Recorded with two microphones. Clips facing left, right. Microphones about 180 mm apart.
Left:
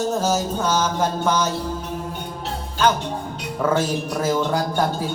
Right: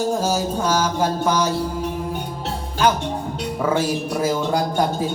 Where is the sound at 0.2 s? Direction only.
10° right (ahead or behind).